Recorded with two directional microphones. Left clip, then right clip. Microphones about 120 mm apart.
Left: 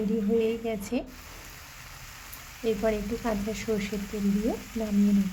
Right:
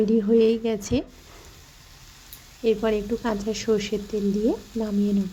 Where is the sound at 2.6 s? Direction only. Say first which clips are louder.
Right 5 dB; 15° right (ahead or behind).